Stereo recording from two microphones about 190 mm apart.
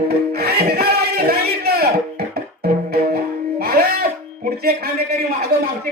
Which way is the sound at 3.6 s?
55° right (ahead or behind).